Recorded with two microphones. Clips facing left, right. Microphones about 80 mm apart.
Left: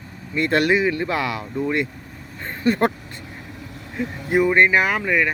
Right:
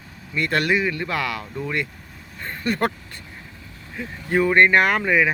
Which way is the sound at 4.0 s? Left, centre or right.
Centre.